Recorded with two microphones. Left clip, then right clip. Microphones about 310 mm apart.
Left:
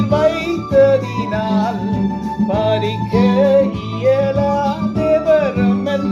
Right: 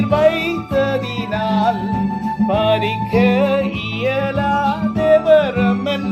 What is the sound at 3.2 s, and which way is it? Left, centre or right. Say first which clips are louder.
Music: left 3 dB; right.